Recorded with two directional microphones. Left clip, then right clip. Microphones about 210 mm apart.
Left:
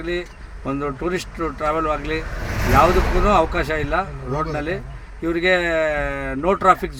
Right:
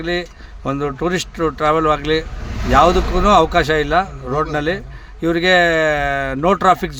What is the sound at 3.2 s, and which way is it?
Speech, 40° right (ahead or behind).